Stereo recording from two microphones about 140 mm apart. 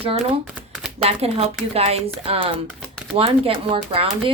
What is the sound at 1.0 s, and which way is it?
Speech, 45° right (ahead or behind).